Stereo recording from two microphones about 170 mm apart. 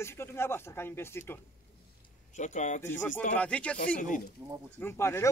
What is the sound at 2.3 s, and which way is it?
Speech, 45° left (ahead or behind).